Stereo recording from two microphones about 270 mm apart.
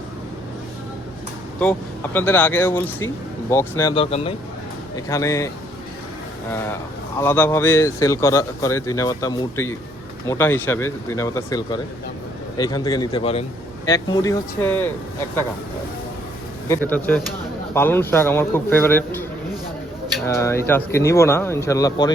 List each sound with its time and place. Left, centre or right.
2.1 s speech: centre
7.2 s speech: centre
16.6 s speech: centre
20.2 s speech: centre